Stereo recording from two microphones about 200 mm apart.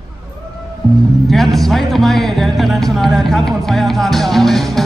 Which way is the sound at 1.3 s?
Centre (ahead or behind).